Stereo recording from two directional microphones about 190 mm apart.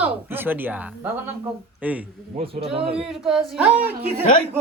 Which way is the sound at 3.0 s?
Centre (ahead or behind).